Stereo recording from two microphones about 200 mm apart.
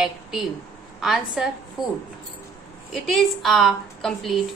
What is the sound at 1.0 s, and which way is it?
A woman's voice, centre (ahead or behind).